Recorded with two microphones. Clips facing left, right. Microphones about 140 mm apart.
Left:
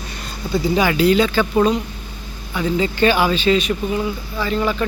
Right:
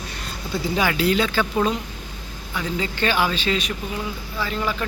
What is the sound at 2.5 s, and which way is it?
Speech, 10° left (ahead or behind).